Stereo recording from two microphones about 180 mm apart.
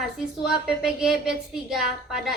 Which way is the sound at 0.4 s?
5° right (ahead or behind).